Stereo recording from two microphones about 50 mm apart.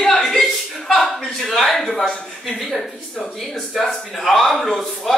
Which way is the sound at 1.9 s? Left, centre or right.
Centre.